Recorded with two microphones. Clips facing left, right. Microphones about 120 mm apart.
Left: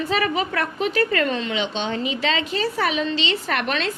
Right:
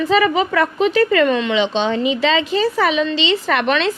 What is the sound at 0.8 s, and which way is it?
A woman's voice, 90° right.